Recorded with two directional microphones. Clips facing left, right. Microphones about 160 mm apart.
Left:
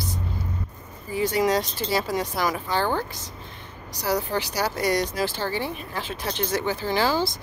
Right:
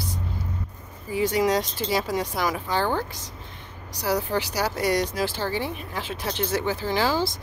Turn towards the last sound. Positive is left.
turn(degrees=-10)  # may be behind; listen again after turning